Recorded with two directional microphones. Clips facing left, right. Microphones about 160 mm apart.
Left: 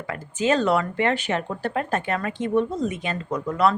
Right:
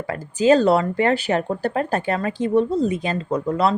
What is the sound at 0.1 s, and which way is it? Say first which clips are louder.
Speech: right 6 dB; 35° right (ahead or behind).